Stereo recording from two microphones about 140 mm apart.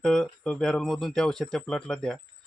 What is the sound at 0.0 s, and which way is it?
Speech, 5° left (ahead or behind).